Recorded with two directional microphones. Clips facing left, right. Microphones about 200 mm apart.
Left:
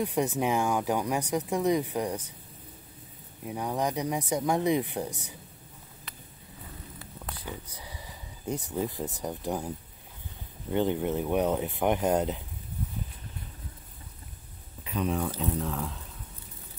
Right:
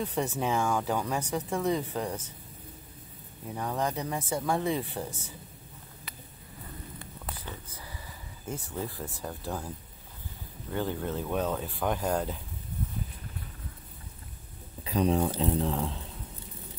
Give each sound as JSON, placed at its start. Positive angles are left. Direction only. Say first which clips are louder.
{"t": 0.0, "sound": "speech", "louder": "left 3 dB", "side_deg": 15}
{"t": 3.4, "sound": "speech", "louder": "left 2 dB", "side_deg": 10}
{"t": 7.4, "sound": "speech", "louder": "left 3 dB", "side_deg": 15}
{"t": 14.8, "sound": "speech", "louder": "right 4 dB", "side_deg": -35}